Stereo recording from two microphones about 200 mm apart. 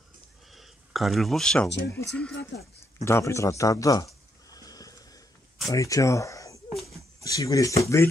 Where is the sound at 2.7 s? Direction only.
15° left (ahead or behind).